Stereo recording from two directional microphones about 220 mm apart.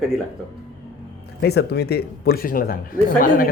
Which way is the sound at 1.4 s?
50° left (ahead or behind).